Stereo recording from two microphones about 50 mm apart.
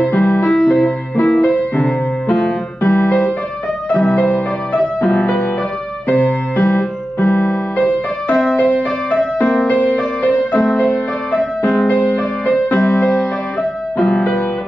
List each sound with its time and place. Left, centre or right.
0.0 s music: left
0.5 s music: centre